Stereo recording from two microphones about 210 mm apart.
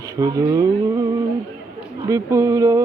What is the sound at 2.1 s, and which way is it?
Speech, 15° right (ahead or behind).